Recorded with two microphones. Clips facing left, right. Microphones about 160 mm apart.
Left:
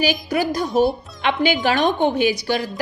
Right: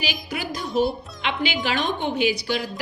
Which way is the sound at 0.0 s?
45° left (ahead or behind).